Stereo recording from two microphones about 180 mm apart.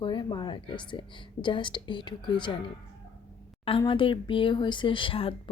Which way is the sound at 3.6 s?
30° left (ahead or behind).